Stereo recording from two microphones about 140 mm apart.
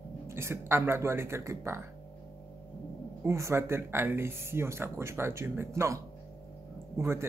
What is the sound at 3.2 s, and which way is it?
A man's voice, 20° right (ahead or behind).